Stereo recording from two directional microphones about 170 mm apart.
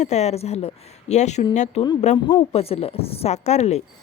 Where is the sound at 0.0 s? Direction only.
40° left (ahead or behind).